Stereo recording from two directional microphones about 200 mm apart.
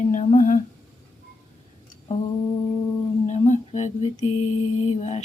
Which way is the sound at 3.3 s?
35° left (ahead or behind).